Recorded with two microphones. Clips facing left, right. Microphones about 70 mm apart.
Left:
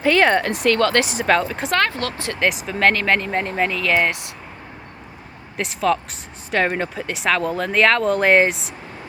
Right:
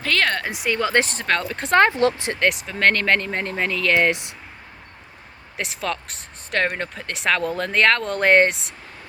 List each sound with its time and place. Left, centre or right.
0.0 s speech: centre
0.4 s speech: centre
1.0 s speech: centre
1.7 s speech: right
2.4 s speech: centre
4.1 s speech: right
5.5 s speech: centre